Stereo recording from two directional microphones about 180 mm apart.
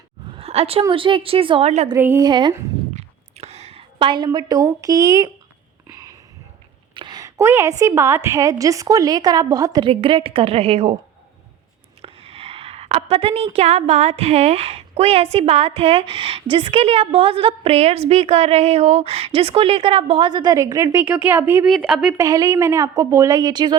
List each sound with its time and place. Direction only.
0.3 s a woman's voice: 35° right (ahead or behind)
1.9 s a woman's voice: 15° right (ahead or behind)
2.9 s a sound: 35° right (ahead or behind); by 6.1 s 20° right (ahead or behind)
6.9 s a woman's voice: 25° right (ahead or behind)
12.0 s a woman's voice: 35° right (ahead or behind); by 21.7 s 10° right (ahead or behind)
21.7 s a woman's voice: centre (ahead or behind)
22.2 s a woman's voice: 20° right (ahead or behind)